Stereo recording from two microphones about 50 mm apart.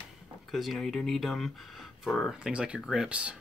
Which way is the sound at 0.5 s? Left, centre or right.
Centre.